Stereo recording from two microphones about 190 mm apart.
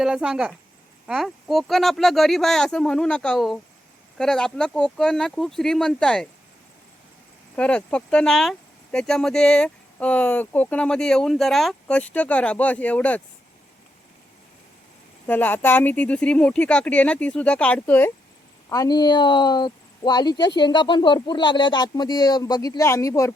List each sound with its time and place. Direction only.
0.0 s speech: 5° right (ahead or behind)
7.5 s speech: 5° left (ahead or behind)
15.3 s speech: 10° left (ahead or behind)
18.7 s speech: 20° left (ahead or behind)